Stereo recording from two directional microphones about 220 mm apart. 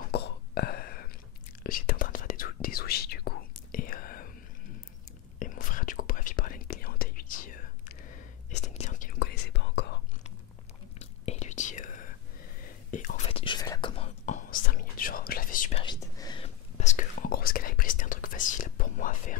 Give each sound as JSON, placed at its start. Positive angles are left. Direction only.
{"t": 0.1, "sound": "whispering", "side_deg": 45}
{"t": 5.4, "sound": "whispering", "side_deg": 35}
{"t": 11.0, "sound": "whispering", "side_deg": 30}
{"t": 15.8, "sound": "whispering", "side_deg": 20}
{"t": 16.7, "sound": "whispering", "side_deg": 35}